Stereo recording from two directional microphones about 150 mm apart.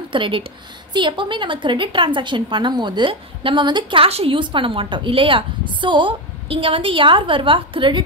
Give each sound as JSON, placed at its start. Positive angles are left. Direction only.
{"t": 0.1, "sound": "a woman's voice", "side_deg": -35}